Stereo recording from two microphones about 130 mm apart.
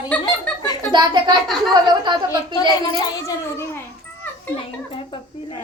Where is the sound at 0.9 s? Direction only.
35° right (ahead or behind).